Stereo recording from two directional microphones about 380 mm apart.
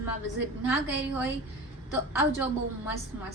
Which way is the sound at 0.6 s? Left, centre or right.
Centre.